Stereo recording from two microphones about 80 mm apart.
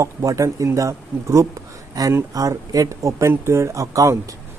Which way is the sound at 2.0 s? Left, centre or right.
Right.